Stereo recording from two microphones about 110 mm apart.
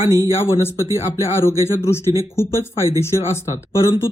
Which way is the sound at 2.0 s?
30° right (ahead or behind).